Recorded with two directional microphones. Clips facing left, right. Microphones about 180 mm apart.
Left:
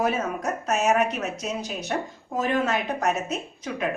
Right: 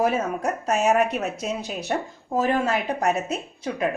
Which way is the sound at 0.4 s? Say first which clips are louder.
Right 2 dB; 30° right (ahead or behind).